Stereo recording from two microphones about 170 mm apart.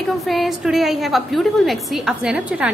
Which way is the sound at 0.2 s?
Centre (ahead or behind).